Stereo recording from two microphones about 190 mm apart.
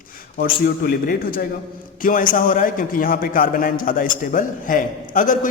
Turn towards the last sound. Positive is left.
turn(degrees=45)  # may be behind; listen again after turning